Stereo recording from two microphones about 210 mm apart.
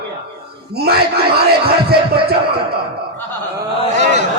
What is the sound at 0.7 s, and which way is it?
Speech, 50° right (ahead or behind).